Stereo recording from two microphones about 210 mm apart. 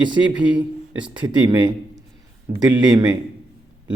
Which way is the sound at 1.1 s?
20° right (ahead or behind).